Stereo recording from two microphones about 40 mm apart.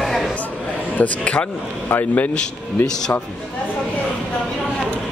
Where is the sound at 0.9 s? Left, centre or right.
Left.